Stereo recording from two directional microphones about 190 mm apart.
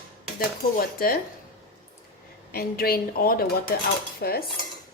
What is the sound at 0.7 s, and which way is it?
Speech, 50° left (ahead or behind).